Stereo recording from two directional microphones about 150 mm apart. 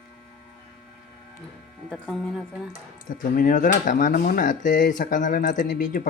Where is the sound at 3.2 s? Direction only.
65° left (ahead or behind).